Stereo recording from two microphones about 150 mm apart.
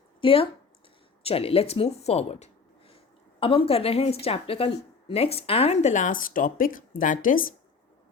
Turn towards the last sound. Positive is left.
turn(degrees=65)  # may be behind; listen again after turning